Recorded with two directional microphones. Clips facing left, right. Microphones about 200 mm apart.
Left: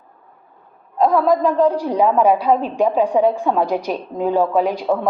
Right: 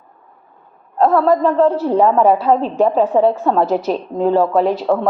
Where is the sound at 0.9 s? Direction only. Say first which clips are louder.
Right 2 dB; 10° left (ahead or behind).